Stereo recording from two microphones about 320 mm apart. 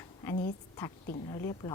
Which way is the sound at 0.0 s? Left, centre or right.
Centre.